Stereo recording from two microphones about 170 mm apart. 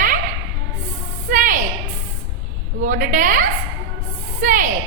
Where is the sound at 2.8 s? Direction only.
50° right (ahead or behind).